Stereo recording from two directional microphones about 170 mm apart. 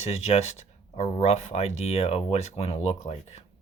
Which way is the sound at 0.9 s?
40° left (ahead or behind).